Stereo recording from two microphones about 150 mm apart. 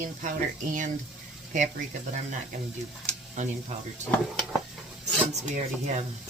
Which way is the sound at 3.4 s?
55° right (ahead or behind).